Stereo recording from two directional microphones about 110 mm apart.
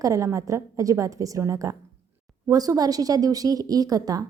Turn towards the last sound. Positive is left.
turn(degrees=-35)  # may be behind; listen again after turning